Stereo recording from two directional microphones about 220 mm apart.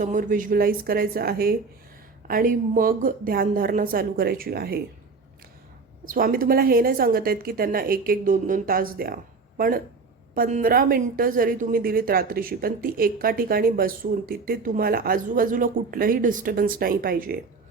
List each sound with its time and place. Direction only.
0.0 s a woman's voice: 35° right (ahead or behind)
6.1 s a woman's voice: 40° right (ahead or behind)